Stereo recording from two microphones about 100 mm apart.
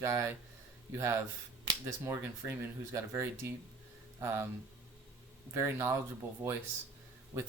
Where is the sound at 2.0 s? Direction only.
25° right (ahead or behind).